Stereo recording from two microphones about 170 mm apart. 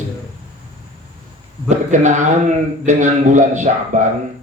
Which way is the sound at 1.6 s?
45° right (ahead or behind).